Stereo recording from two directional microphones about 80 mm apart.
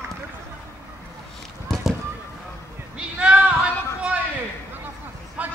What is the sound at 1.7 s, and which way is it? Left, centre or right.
Run, centre.